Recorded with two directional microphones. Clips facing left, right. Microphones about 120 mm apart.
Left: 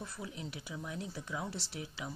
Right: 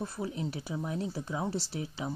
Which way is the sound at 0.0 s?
35° right (ahead or behind).